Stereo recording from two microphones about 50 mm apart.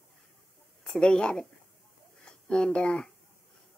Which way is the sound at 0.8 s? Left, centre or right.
Centre.